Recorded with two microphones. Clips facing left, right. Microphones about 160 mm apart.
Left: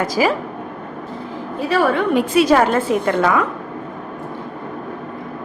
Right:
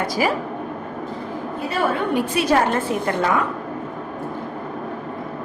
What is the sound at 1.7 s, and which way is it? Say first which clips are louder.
A woman's voice: left 5 dB; 90° left.